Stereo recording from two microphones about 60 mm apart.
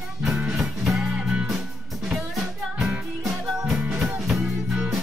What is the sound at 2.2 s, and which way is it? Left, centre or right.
Music, centre.